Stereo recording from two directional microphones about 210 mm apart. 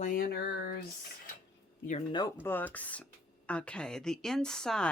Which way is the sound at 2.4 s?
10° left (ahead or behind).